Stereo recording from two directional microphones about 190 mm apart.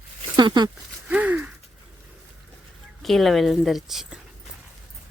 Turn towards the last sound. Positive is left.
turn(degrees=0)  # may be behind; listen again after turning